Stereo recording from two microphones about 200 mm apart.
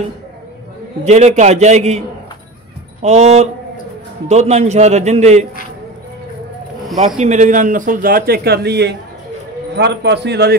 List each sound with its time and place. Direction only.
1.0 s a man's voice: 35° right (ahead or behind)
7.2 s a man's voice: 35° right (ahead or behind); by 10.5 s 55° right (ahead or behind)